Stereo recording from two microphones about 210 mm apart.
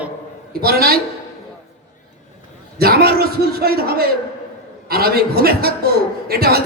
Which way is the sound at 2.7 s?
45° right (ahead or behind).